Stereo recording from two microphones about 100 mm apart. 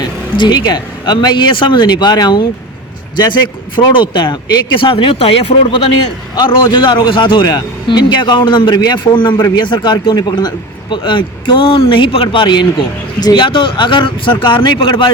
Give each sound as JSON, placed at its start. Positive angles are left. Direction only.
{"t": 0.3, "sound": "speech", "side_deg": 50}
{"t": 6.5, "sound": "speech", "side_deg": 50}